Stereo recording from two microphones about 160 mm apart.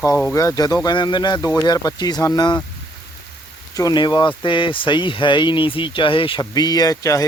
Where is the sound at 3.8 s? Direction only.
25° left (ahead or behind).